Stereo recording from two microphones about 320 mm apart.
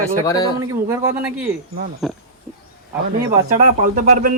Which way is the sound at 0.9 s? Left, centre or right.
Centre.